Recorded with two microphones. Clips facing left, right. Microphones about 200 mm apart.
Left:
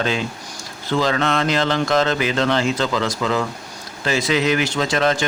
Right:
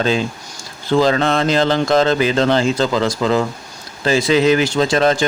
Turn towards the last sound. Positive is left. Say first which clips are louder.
# right 4 dB
turn(degrees=-35)  # may be behind; listen again after turning